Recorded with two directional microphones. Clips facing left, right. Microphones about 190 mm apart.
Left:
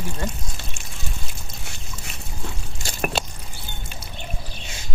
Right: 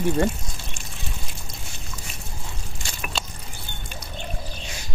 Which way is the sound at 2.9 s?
55° left (ahead or behind).